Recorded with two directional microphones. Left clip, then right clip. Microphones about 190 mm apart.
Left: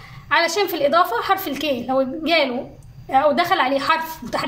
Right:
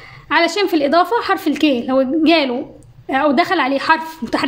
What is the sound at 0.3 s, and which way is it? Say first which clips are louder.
A woman's voice: right 3 dB; 45° right (ahead or behind).